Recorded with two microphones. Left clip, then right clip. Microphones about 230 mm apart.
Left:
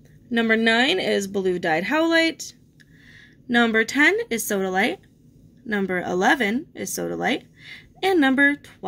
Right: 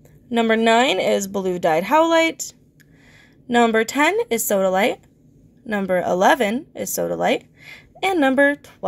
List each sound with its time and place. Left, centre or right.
0.3 s speech: centre